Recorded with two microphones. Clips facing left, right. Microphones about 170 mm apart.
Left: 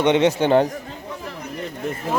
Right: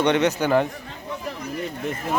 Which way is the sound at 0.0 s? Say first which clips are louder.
Left 3 dB; 25° left (ahead or behind).